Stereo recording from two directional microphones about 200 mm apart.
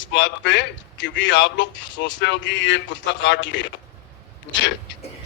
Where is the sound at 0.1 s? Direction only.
65° left (ahead or behind).